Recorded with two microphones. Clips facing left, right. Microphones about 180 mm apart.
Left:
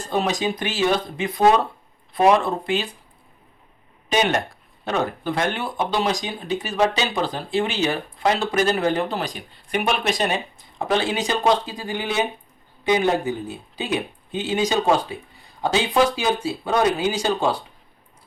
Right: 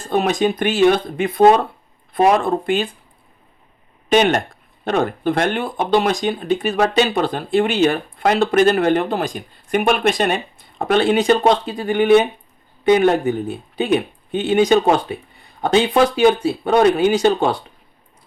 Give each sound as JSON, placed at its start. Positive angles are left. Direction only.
{"t": 0.1, "sound": "speech", "side_deg": -55}
{"t": 4.1, "sound": "speech", "side_deg": -55}